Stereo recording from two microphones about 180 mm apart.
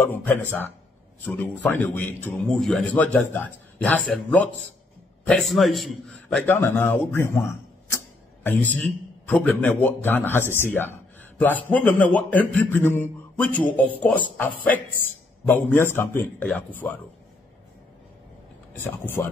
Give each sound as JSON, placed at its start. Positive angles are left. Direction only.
{"t": 0.0, "sound": "a man's voice", "side_deg": 10}
{"t": 8.7, "sound": "a man's voice", "side_deg": 10}
{"t": 18.7, "sound": "a man's voice", "side_deg": 10}